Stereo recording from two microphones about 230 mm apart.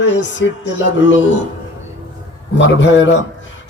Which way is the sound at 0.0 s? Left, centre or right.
Left.